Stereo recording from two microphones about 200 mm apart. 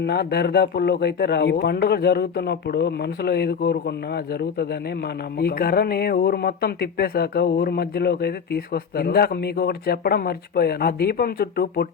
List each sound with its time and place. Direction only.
0.0 s speech: 55° left (ahead or behind)